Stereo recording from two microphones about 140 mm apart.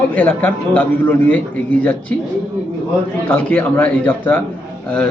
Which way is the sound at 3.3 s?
15° left (ahead or behind).